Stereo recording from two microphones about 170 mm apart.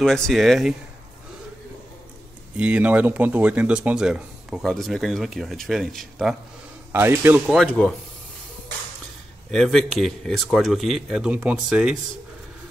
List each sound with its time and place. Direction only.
0.0 s speech: centre (ahead or behind)
2.5 s speech: 10° right (ahead or behind)
6.9 s a man's voice: 15° right (ahead or behind); by 7.9 s 5° left (ahead or behind)
9.5 s speech: centre (ahead or behind)